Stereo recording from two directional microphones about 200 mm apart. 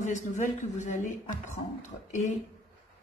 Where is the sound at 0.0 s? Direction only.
35° left (ahead or behind).